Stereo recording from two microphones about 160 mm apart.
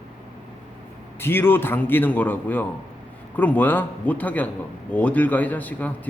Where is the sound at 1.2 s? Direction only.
15° left (ahead or behind).